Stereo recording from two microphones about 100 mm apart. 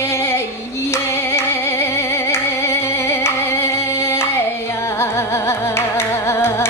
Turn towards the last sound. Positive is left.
turn(degrees=25)  # may be behind; listen again after turning